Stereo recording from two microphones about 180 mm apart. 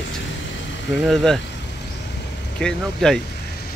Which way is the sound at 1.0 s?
Centre (ahead or behind).